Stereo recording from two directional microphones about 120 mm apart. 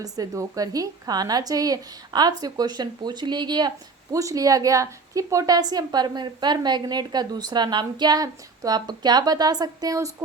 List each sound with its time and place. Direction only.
0.0 s a woman's voice: 30° right (ahead or behind)